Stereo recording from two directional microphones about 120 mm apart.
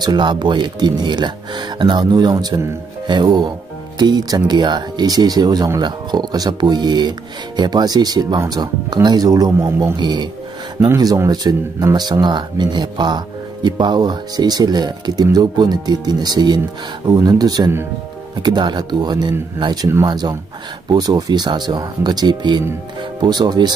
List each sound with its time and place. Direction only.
0.0 s speech: 40° right (ahead or behind)